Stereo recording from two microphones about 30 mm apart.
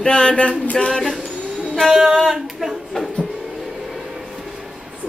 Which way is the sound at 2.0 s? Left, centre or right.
Centre.